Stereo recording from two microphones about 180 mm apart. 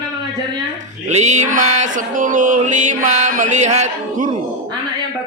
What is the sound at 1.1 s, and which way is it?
Mantra, 40° right (ahead or behind).